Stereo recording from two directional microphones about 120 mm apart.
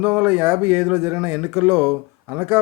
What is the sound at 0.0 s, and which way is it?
Speech, 10° right (ahead or behind).